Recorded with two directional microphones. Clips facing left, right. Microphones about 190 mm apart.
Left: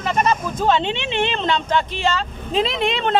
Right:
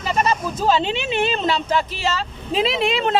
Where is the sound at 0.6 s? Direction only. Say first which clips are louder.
Right 1 dB; 5° right (ahead or behind).